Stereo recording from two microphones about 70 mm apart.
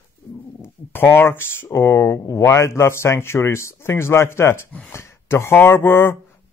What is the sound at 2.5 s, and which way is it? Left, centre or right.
Speech, left.